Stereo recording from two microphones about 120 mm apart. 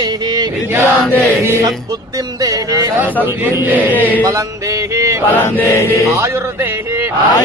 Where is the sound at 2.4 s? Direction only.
30° right (ahead or behind).